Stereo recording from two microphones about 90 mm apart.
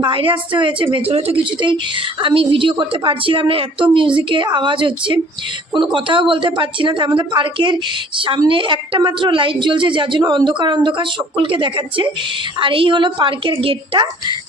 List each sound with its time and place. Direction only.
0.0 s a woman's voice: 80° right
3.9 s a woman's voice: 65° right (ahead or behind)
8.4 s a woman's voice: 70° right (ahead or behind)
9.0 s a woman's voice: 60° right (ahead or behind)